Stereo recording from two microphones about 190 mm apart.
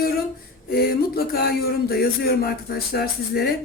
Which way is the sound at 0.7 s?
50° left (ahead or behind).